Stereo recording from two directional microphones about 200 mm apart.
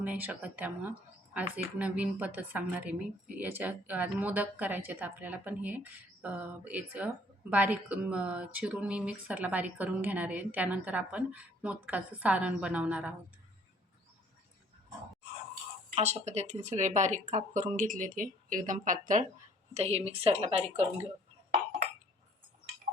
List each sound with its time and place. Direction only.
0.0 s speech: 5° right (ahead or behind)
16.0 s speech: 30° right (ahead or behind)